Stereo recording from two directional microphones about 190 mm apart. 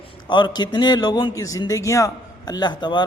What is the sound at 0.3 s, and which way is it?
A man's voice, 25° left (ahead or behind).